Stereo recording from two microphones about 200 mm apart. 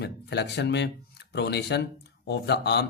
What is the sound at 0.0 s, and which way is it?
Speech, 60° left (ahead or behind).